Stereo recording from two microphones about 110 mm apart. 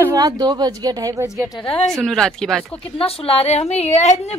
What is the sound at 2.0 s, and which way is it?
Speech, 5° left (ahead or behind).